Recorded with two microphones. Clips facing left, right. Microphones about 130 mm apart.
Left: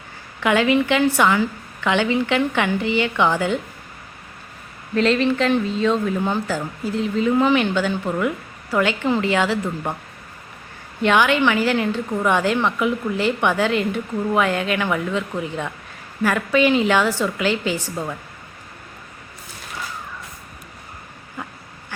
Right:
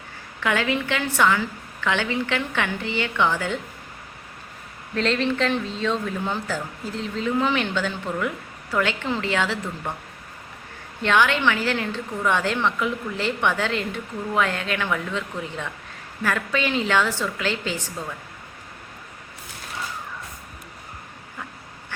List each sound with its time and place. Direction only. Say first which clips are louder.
0.3 s a woman's voice: left 6 dB; 15° left (ahead or behind)
4.9 s a woman's voice: left 5 dB; 5° left (ahead or behind)
11.0 s a woman's voice: left 3 dB; 10° left (ahead or behind)